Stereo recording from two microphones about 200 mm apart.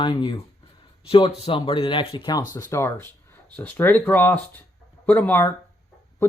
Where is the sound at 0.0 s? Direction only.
20° left (ahead or behind).